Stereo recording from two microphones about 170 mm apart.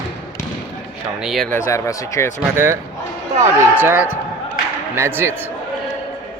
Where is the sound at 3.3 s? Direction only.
15° right (ahead or behind).